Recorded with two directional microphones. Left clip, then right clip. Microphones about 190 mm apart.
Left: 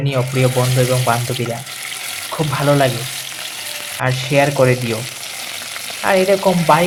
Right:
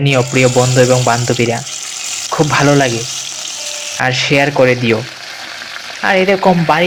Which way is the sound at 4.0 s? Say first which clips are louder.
Right 4 dB; 20° right (ahead or behind).